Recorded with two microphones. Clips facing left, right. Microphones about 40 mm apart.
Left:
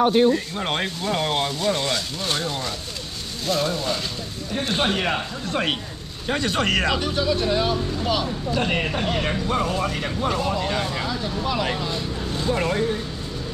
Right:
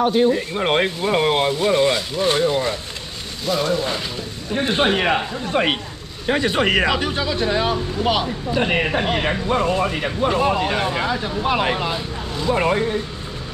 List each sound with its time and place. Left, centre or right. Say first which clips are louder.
0.0 s speech: even; centre
0.3 s speech: right 4 dB; centre
7.1 s speech: right 1 dB; right
8.5 s speech: right 4 dB; centre
10.4 s speech: right 5 dB; right